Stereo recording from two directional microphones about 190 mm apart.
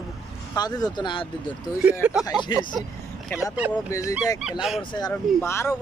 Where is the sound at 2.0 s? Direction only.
5° right (ahead or behind).